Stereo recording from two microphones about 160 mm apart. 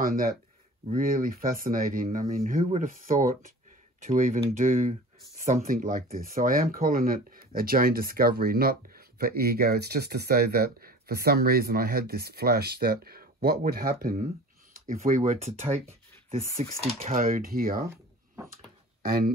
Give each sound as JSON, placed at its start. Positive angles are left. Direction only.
{"t": 0.0, "sound": "speech", "side_deg": -65}
{"t": 14.9, "sound": "speech", "side_deg": -55}
{"t": 17.1, "sound": "speech", "side_deg": -60}
{"t": 17.8, "sound": "a sound", "side_deg": -15}
{"t": 19.0, "sound": "speech", "side_deg": -65}